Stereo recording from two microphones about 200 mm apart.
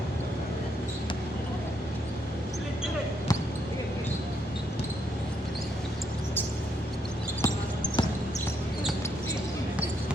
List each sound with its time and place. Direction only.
7.4 s basketball bounce: 20° left (ahead or behind)